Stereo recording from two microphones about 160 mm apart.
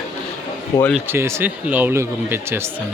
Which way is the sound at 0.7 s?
20° left (ahead or behind).